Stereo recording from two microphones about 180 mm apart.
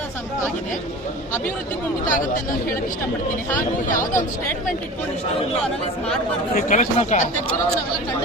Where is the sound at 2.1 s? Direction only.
45° left (ahead or behind).